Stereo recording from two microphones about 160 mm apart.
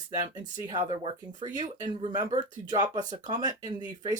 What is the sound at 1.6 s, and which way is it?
Speech, 50° right (ahead or behind).